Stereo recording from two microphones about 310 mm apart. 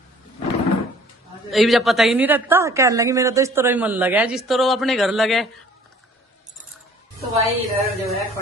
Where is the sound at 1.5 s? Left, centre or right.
Centre.